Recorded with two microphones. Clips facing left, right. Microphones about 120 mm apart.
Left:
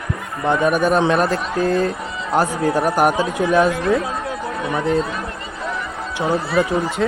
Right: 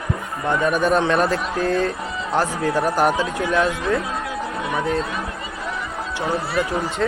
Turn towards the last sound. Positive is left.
turn(degrees=15)  # may be behind; listen again after turning